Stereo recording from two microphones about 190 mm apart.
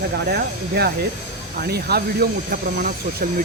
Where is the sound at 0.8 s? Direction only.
55° right (ahead or behind).